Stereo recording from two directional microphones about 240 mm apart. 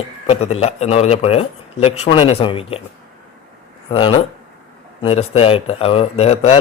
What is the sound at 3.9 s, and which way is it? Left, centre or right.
A man's voice, left.